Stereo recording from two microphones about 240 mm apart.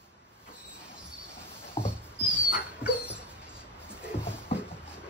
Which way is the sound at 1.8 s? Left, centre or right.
Left.